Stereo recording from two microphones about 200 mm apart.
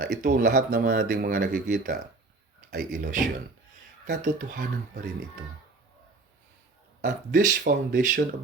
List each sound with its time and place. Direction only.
0.0 s speech: 50° right (ahead or behind)
7.0 s speech: 55° right (ahead or behind)